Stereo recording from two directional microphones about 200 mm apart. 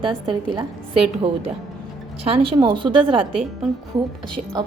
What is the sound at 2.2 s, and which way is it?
A woman's voice, 30° right (ahead or behind).